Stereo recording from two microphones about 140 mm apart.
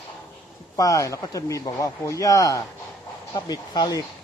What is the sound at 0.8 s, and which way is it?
Speech, 25° left (ahead or behind).